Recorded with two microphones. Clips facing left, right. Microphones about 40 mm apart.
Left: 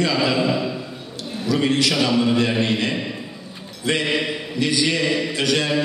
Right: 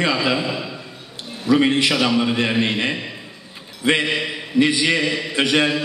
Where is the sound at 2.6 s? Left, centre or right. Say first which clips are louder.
Even; right.